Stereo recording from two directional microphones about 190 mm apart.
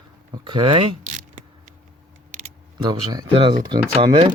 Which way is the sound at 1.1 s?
40° right (ahead or behind).